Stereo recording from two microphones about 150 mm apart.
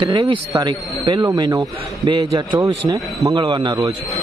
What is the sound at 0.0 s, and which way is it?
A man's voice, 30° right (ahead or behind).